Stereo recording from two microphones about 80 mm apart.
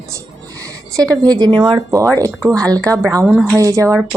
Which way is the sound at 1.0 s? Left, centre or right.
Right.